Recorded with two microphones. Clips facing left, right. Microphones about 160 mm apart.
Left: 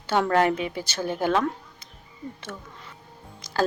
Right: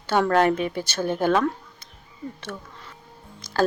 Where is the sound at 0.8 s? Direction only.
55° right (ahead or behind).